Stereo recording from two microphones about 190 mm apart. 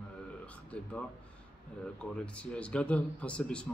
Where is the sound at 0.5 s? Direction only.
5° left (ahead or behind).